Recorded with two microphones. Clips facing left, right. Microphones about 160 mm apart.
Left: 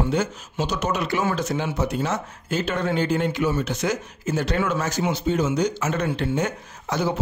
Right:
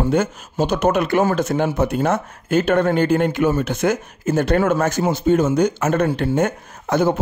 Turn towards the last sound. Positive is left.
turn(degrees=-50)  # may be behind; listen again after turning